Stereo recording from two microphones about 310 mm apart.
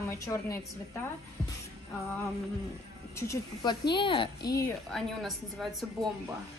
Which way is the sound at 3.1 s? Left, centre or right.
Centre.